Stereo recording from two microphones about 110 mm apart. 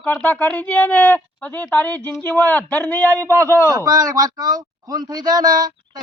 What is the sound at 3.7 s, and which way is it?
Speech, 35° right (ahead or behind).